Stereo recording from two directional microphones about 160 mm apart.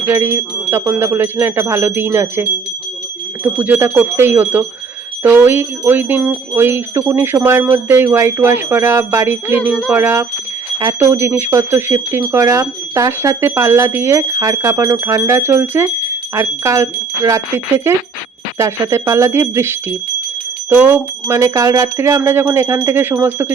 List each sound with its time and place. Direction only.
0.0 s speech: 15° right (ahead or behind)